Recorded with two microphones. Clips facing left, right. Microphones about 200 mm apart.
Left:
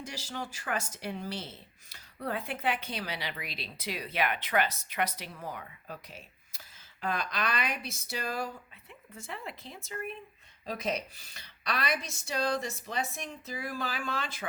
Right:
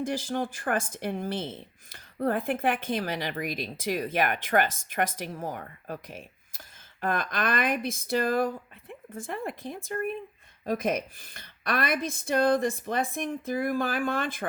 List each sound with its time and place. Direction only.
0.0 s speech: 50° right (ahead or behind)